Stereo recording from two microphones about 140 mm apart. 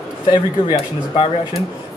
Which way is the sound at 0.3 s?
35° left (ahead or behind).